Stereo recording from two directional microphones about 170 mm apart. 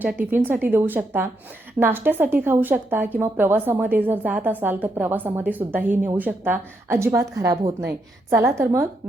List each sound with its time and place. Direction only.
0.0 s speech: 10° right (ahead or behind)